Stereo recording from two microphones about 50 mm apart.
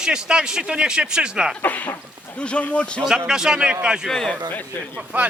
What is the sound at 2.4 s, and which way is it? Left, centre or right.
Speech, left.